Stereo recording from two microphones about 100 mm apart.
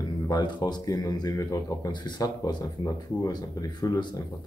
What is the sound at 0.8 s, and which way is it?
Speech, 35° left (ahead or behind).